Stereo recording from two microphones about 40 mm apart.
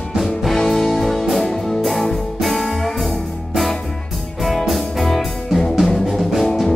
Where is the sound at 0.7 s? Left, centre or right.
Centre.